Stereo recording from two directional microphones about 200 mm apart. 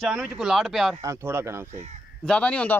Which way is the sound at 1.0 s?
15° right (ahead or behind).